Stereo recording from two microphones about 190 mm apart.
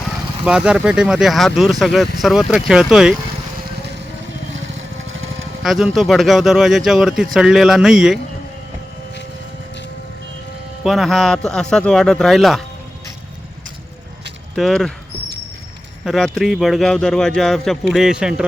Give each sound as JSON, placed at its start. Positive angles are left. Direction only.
{"t": 0.4, "sound": "speech", "side_deg": -5}
{"t": 5.1, "sound": "a sound", "side_deg": -90}
{"t": 5.6, "sound": "speech", "side_deg": 0}
{"t": 10.8, "sound": "speech", "side_deg": 0}
{"t": 14.5, "sound": "speech", "side_deg": 0}
{"t": 16.0, "sound": "speech", "side_deg": 0}